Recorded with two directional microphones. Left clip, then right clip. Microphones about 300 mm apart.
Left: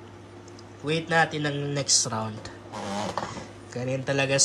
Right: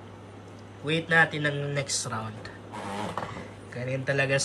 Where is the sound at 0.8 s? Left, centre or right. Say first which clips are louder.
Right 1 dB; centre.